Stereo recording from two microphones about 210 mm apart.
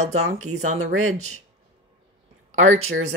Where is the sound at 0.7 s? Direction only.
90° right.